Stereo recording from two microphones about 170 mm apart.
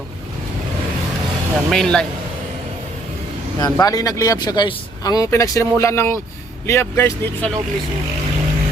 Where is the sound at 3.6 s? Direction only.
20° left (ahead or behind).